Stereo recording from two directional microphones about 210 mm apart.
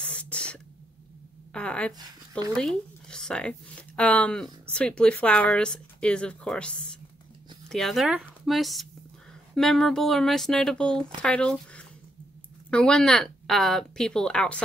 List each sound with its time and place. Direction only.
0.0 s spray: 5° left (ahead or behind)
1.5 s a woman's voice: 5° left (ahead or behind)
2.0 s speech: 20° right (ahead or behind)
2.5 s speech: 5° left (ahead or behind)